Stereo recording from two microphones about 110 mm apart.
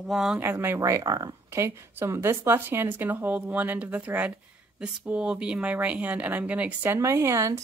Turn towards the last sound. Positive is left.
turn(degrees=-30)  # may be behind; listen again after turning